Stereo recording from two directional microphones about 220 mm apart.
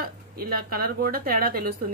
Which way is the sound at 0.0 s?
40° right (ahead or behind).